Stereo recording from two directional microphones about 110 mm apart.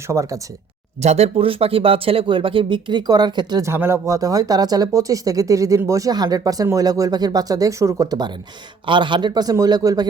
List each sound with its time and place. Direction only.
0.1 s speech: 30° right (ahead or behind)
1.0 s speech: 80° right; by 3.6 s 40° right (ahead or behind)
3.6 s speech: 20° right (ahead or behind)
8.9 s speech: 45° right (ahead or behind)